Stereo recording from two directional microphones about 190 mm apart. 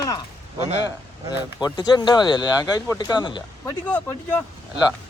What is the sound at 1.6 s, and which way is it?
Speech, 20° left (ahead or behind).